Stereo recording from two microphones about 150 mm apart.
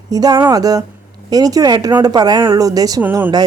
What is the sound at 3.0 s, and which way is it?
Speech, 15° right (ahead or behind).